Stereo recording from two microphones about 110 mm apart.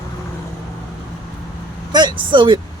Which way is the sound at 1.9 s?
40° right (ahead or behind).